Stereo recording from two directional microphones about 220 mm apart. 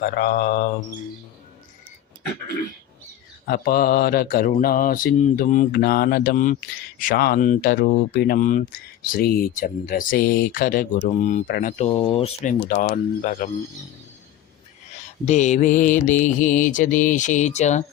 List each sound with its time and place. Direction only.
0.0 s mantra: 45° left (ahead or behind)
3.4 s mantra: 40° left (ahead or behind)
11.9 s mantra: 25° left (ahead or behind)
15.3 s mantra: 30° left (ahead or behind)